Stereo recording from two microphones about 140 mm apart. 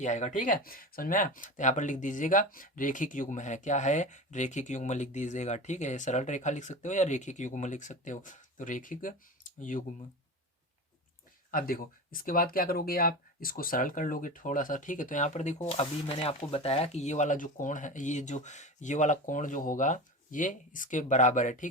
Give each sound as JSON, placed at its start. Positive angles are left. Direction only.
{"t": 0.0, "sound": "speech", "side_deg": 60}
{"t": 11.5, "sound": "speech", "side_deg": 90}
{"t": 15.5, "sound": "speech", "side_deg": 45}